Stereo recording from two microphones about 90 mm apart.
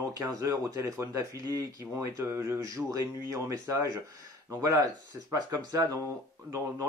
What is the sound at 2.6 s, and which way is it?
Speech, 40° right (ahead or behind).